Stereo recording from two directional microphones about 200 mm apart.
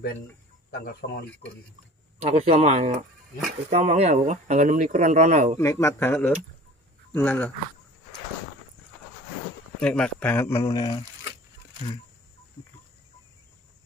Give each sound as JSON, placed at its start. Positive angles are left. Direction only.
{"t": 0.7, "sound": "speech", "side_deg": 50}
{"t": 2.1, "sound": "speech", "side_deg": -35}
{"t": 5.6, "sound": "speech", "side_deg": 15}
{"t": 9.8, "sound": "speech", "side_deg": 5}